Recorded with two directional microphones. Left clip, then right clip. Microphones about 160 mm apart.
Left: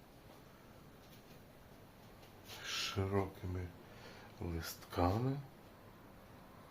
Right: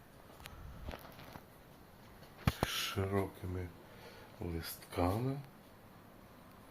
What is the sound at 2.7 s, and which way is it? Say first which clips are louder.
Speech: right 2 dB; 40° right (ahead or behind).